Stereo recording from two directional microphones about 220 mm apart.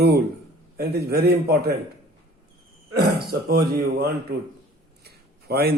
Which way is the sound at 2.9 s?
45° right (ahead or behind).